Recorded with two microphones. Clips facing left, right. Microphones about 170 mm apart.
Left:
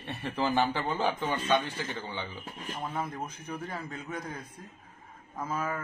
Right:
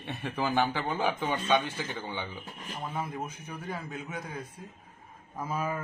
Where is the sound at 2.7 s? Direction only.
Centre (ahead or behind).